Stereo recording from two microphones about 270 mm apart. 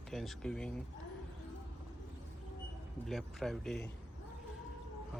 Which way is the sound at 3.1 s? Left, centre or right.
Centre.